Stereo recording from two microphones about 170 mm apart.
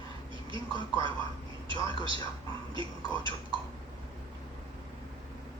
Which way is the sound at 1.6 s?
30° right (ahead or behind).